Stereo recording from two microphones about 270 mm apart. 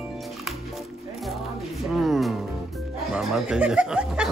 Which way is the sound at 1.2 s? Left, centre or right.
Centre.